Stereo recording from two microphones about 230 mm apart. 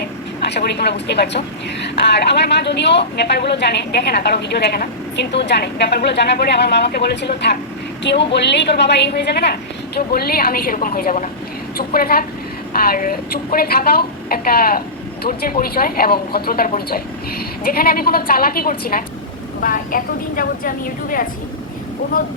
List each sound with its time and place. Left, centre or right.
0.0 s vehicle: left
1.8 s a woman's voice: left